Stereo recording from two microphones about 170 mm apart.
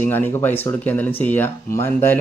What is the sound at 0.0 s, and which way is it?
Speech, 10° left (ahead or behind).